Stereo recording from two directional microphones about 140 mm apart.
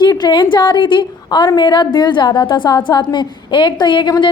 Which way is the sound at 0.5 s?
35° left (ahead or behind).